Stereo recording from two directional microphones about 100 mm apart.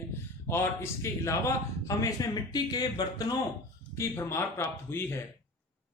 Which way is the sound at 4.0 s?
25° left (ahead or behind).